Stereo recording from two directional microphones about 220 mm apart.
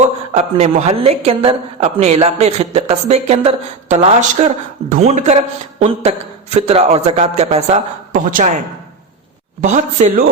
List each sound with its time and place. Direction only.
0.0 s speech: 30° right (ahead or behind)
9.6 s speech: 35° right (ahead or behind)